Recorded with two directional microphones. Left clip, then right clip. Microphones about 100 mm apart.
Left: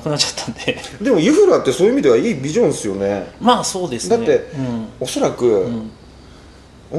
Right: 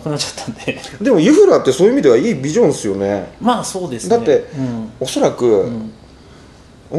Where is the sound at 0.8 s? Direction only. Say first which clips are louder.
Right 3 dB; 10° right (ahead or behind).